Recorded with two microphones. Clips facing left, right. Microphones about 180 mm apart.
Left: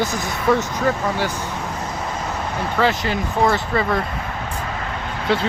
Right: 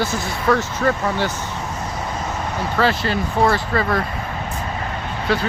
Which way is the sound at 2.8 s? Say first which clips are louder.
Even; 15° left (ahead or behind).